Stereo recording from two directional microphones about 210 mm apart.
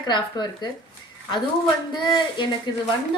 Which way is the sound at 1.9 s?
20° left (ahead or behind).